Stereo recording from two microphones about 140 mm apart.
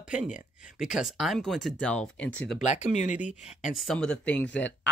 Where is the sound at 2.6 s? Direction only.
55° left (ahead or behind).